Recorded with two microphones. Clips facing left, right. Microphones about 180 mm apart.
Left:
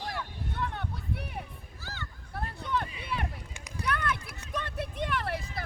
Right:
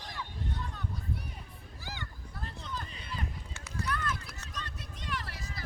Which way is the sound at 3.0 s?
70° left (ahead or behind).